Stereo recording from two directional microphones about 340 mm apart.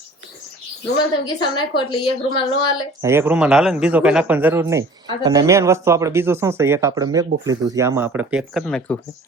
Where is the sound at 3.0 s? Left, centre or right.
Centre.